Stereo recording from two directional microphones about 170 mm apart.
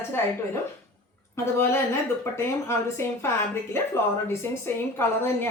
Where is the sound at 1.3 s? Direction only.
15° left (ahead or behind).